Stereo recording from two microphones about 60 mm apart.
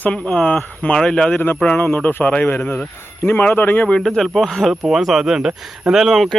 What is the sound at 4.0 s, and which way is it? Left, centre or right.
Speech, centre.